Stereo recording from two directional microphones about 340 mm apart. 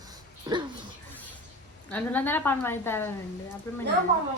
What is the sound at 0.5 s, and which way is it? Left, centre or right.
Speech, centre.